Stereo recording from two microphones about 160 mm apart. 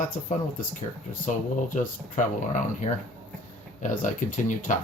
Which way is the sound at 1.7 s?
55° left (ahead or behind).